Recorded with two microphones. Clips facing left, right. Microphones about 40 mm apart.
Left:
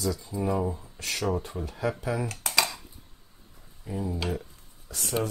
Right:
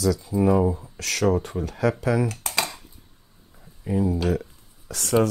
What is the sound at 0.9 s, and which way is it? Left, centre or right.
Speech, right.